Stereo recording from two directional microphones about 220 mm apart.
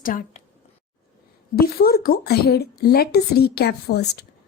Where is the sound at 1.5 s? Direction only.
45° left (ahead or behind).